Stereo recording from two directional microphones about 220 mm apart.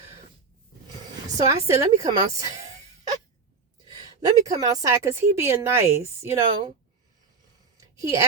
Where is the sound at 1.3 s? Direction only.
15° right (ahead or behind).